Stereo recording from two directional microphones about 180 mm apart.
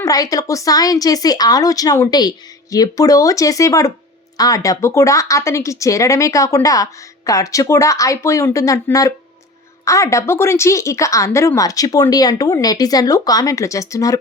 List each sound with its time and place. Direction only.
0.0 s a woman's voice: 20° left (ahead or behind)